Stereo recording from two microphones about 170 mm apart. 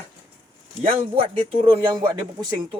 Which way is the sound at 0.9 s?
35° right (ahead or behind).